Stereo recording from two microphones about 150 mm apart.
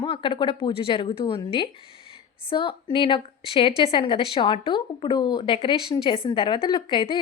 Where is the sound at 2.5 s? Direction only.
35° left (ahead or behind).